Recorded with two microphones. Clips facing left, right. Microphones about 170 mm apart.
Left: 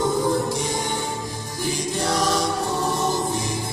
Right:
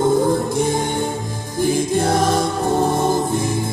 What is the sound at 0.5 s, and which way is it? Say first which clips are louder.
Music: right 6 dB; 55° right (ahead or behind).